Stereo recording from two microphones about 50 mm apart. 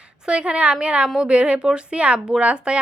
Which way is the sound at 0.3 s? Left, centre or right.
Right.